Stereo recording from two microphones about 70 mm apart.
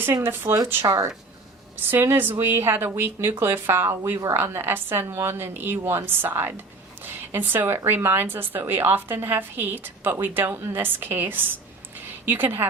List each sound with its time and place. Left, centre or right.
0.0 s speech: right
7.0 s a sound: right
7.9 s a woman's voice: right